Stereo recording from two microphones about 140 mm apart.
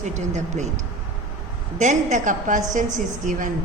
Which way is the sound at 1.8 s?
60° right (ahead or behind).